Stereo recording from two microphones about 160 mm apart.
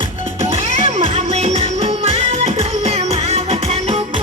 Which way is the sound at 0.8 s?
40° right (ahead or behind).